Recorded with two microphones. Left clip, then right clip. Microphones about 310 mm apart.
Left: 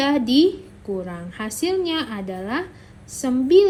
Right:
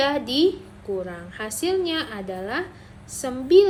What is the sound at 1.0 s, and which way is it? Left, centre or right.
A woman's voice, centre.